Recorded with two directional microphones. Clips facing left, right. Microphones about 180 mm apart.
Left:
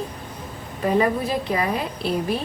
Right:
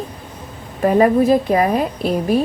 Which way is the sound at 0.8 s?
45° right (ahead or behind).